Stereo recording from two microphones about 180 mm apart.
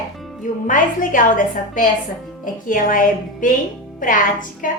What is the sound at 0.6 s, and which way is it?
Speech, 50° left (ahead or behind).